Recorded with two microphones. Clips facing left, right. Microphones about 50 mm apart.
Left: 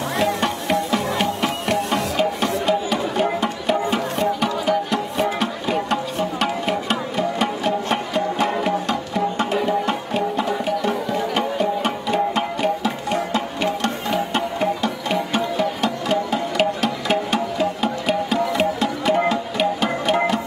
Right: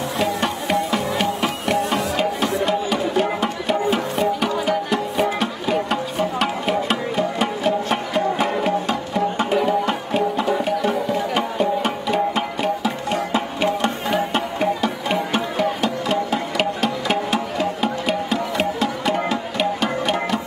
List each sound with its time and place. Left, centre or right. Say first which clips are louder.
0.2 s music: left 1 dB; centre
13.3 s music: right 1 dB; centre